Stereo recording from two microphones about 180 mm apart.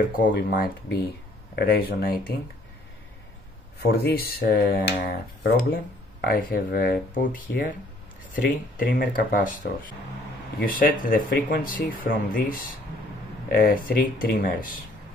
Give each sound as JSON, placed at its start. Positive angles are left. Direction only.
{"t": 0.3, "sound": "speech", "side_deg": 60}
{"t": 3.8, "sound": "speech", "side_deg": 60}
{"t": 8.7, "sound": "speech", "side_deg": 55}